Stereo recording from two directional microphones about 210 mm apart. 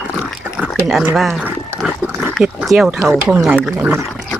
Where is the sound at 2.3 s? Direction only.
Centre (ahead or behind).